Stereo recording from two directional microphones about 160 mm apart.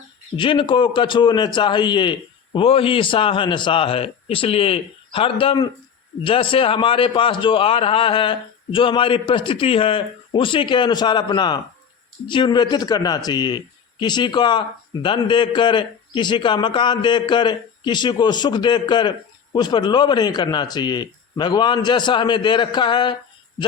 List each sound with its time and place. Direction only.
0.3 s a man's voice: 30° left (ahead or behind)